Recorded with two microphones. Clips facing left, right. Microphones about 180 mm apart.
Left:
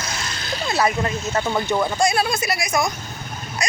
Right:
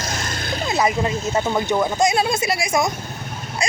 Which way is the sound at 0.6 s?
20° right (ahead or behind).